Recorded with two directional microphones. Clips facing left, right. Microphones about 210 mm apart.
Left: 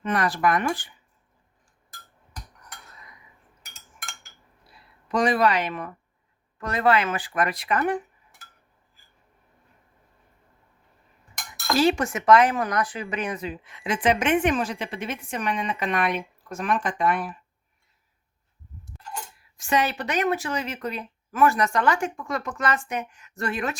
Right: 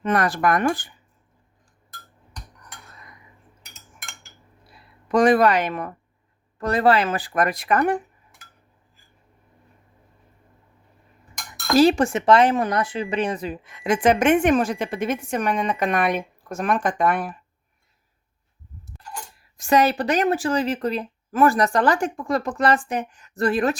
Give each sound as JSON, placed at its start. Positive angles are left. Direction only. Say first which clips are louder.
{"t": 0.0, "sound": "speech", "louder": "right 3 dB", "side_deg": -45}
{"t": 5.0, "sound": "speech", "louder": "right 5 dB", "side_deg": -50}
{"t": 6.6, "sound": "speech", "louder": "right 4 dB", "side_deg": -35}
{"t": 11.8, "sound": "speech", "louder": "right 6 dB", "side_deg": -35}
{"t": 19.5, "sound": "speech", "louder": "right 6 dB", "side_deg": -40}